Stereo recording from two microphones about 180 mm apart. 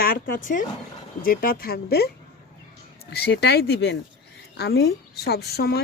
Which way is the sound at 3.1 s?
65° left (ahead or behind).